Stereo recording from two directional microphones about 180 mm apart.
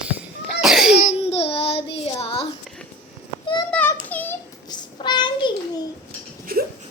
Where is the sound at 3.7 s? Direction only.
10° left (ahead or behind).